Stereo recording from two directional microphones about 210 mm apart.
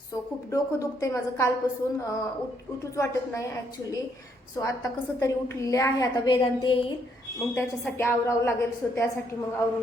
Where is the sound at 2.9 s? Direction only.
15° left (ahead or behind).